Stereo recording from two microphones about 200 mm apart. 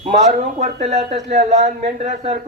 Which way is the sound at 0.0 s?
35° right (ahead or behind).